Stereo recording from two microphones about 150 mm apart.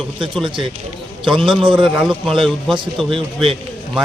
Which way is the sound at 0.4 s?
35° right (ahead or behind).